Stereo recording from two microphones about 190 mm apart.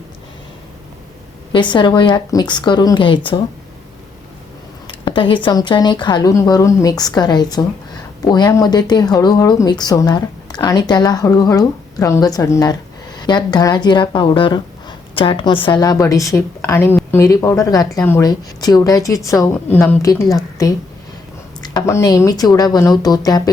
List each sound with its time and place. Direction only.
1.5 s speech: 25° left (ahead or behind)
4.9 s speech: 25° left (ahead or behind)